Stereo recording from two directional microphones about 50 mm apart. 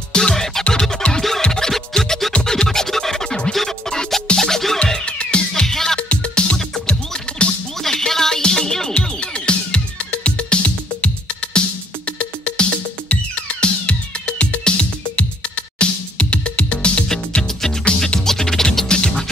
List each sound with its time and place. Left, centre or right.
0.1 s music: centre
5.5 s music: centre
5.9 s music: left
7.8 s music: centre
9.2 s music: left
17.4 s music: centre